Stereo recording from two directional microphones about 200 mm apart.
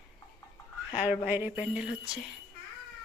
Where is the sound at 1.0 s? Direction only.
10° right (ahead or behind).